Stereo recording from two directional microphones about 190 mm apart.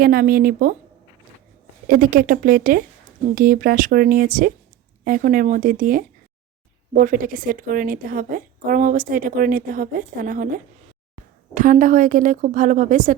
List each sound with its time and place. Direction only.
0.0 s a woman's voice: 50° right (ahead or behind)
1.9 s a woman's voice: 50° right (ahead or behind)